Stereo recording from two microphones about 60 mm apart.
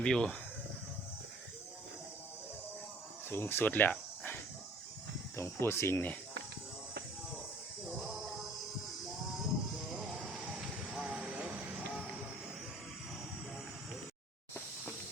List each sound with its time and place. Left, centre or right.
0.0 s speech: centre
3.2 s speech: left
5.4 s speech: left
7.9 s a sound: centre
9.9 s music: centre
10.4 s vehicle: centre
11.9 s music: centre